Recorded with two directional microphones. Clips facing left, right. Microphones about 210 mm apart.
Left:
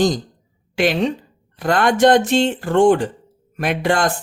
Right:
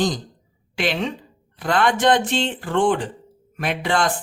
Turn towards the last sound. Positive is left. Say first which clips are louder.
# left 3 dB
turn(degrees=45)  # may be behind; listen again after turning